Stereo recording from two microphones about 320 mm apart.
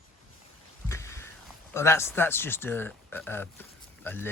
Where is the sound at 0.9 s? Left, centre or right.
Centre.